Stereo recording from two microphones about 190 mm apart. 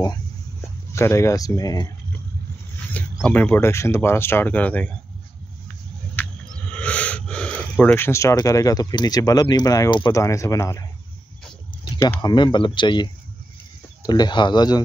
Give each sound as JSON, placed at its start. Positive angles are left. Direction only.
{"t": 0.0, "sound": "a sound", "side_deg": 15}
{"t": 3.2, "sound": "speech", "side_deg": 5}
{"t": 6.7, "sound": "snort", "side_deg": 5}
{"t": 7.8, "sound": "speech", "side_deg": 10}
{"t": 12.0, "sound": "speech", "side_deg": 20}